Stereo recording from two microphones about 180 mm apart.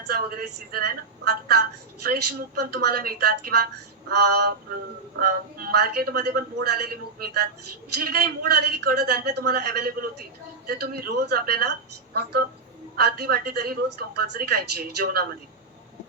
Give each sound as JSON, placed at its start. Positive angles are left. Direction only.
{"t": 0.1, "sound": "a woman's voice", "side_deg": -55}